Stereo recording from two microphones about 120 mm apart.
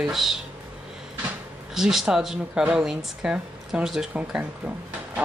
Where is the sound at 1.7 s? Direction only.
5° right (ahead or behind).